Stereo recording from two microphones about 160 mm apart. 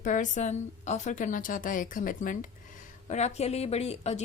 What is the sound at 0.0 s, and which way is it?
A woman's voice, 50° left (ahead or behind).